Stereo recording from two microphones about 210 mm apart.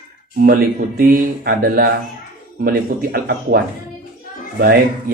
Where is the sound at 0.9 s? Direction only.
45° right (ahead or behind).